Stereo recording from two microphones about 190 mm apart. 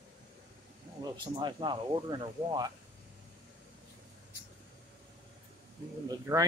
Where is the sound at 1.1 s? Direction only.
25° right (ahead or behind).